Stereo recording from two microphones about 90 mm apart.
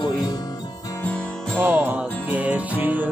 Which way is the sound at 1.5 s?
20° right (ahead or behind).